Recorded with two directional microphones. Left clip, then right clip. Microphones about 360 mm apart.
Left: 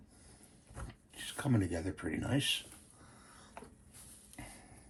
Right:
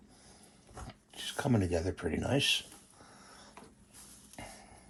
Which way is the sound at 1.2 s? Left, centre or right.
Centre.